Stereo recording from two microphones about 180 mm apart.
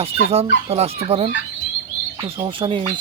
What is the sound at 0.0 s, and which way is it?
Speech, 35° right (ahead or behind).